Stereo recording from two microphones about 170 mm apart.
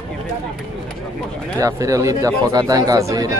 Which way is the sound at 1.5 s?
20° right (ahead or behind).